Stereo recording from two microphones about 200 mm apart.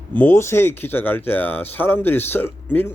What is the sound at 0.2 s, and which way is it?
Speech, 10° left (ahead or behind).